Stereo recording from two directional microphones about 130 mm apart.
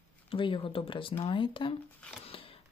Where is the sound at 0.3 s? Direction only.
40° left (ahead or behind).